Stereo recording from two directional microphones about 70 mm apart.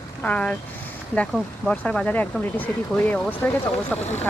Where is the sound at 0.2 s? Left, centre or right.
Centre.